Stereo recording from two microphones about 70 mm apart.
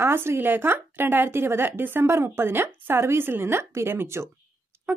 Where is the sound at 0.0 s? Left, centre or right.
Right.